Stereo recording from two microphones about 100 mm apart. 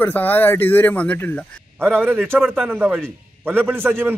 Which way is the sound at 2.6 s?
10° right (ahead or behind).